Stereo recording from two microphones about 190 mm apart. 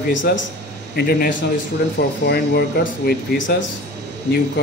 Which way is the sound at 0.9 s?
50° left (ahead or behind).